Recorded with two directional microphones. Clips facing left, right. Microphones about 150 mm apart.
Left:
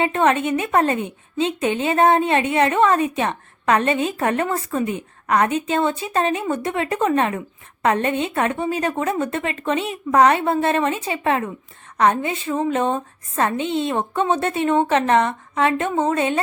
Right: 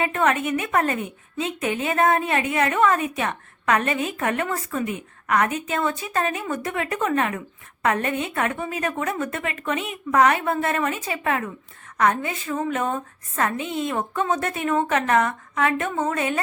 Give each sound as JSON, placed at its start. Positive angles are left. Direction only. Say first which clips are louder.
{"t": 0.0, "sound": "a woman's voice", "louder": "left 4 dB", "side_deg": 25}